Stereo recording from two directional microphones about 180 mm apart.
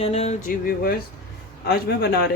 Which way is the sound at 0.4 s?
55° left (ahead or behind).